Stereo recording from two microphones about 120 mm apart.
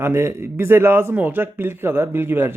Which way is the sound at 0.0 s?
20° right (ahead or behind).